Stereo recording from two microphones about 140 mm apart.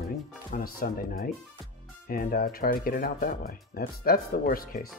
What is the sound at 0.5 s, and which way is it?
Speech, 90° left.